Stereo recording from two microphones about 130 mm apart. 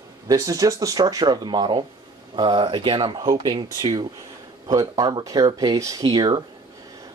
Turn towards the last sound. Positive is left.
turn(degrees=-35)  # may be behind; listen again after turning